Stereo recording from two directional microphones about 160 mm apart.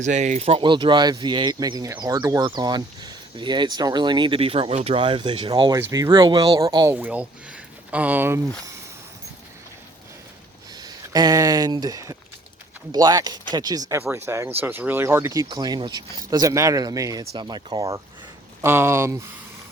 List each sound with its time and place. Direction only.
0.0 s speech: 50° right (ahead or behind); by 6.9 s 25° right (ahead or behind)
6.9 s speech: 10° right (ahead or behind)
10.8 s speech: 25° right (ahead or behind)